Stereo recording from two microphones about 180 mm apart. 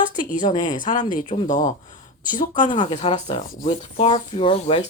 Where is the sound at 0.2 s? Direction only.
45° left (ahead or behind).